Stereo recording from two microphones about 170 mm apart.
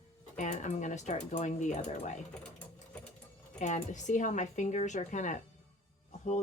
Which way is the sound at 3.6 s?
45° left (ahead or behind).